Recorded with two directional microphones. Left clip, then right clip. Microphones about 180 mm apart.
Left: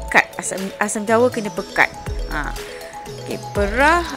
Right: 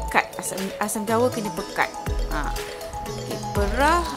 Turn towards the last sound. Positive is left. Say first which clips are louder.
# left 5 dB
turn(degrees=20)  # may be behind; listen again after turning